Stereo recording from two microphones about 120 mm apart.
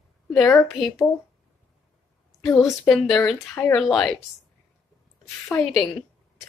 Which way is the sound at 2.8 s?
5° left (ahead or behind).